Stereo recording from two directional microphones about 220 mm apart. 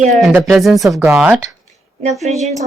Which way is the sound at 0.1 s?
Centre (ahead or behind).